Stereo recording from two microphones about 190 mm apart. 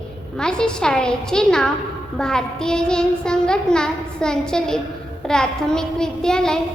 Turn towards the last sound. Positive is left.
turn(degrees=5)  # may be behind; listen again after turning